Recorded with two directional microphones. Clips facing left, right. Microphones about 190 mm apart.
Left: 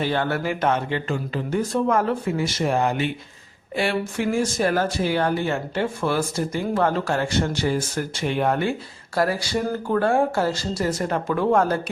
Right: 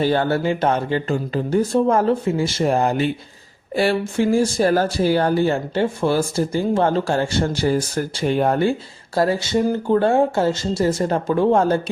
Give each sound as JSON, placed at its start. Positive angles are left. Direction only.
{"t": 0.0, "sound": "speech", "side_deg": -35}